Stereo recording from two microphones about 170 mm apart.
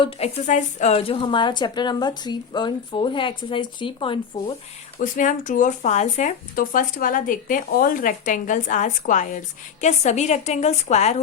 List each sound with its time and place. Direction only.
0.0 s speech: 40° left (ahead or behind)
4.9 s a woman's voice: 50° left (ahead or behind)